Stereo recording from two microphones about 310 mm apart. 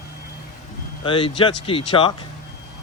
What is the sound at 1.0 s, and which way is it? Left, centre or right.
Speech, centre.